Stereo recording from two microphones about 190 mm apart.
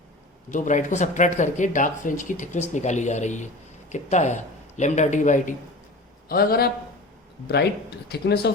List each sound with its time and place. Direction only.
0.5 s speech: 40° left (ahead or behind)
6.2 s a man's voice: 50° left (ahead or behind)